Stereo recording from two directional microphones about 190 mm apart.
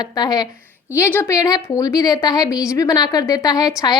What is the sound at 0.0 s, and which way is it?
A woman's voice, 20° left (ahead or behind).